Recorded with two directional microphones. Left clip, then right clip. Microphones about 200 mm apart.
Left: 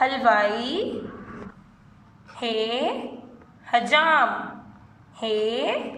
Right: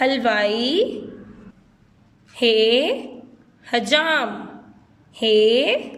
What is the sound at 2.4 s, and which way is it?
A woman's voice, 55° right (ahead or behind).